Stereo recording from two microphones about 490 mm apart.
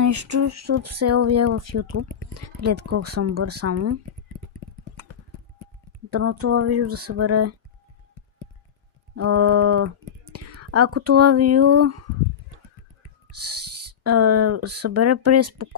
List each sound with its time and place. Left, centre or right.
0.0 s a sound: right
2.8 s speech: right
6.0 s speech: right
9.1 s speech: right
13.3 s speech: right